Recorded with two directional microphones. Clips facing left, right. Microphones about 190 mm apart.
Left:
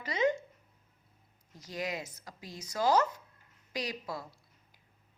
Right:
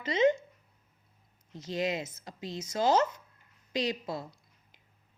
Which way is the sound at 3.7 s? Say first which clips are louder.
Right 5 dB; 25° right (ahead or behind).